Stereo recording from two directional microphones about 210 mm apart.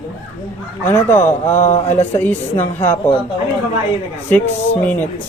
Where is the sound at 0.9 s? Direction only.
10° left (ahead or behind).